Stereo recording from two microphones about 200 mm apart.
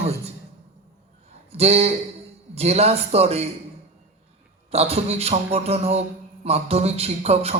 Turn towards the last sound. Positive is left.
turn(degrees=-30)  # may be behind; listen again after turning